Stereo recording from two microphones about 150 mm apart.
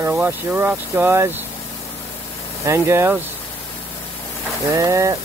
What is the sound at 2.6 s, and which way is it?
Speech, 15° right (ahead or behind).